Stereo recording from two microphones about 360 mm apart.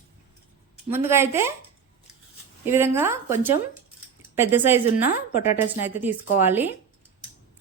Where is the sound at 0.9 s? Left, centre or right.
Centre.